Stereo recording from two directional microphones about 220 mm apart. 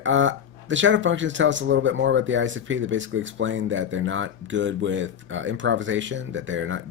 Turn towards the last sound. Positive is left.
turn(degrees=-60)  # may be behind; listen again after turning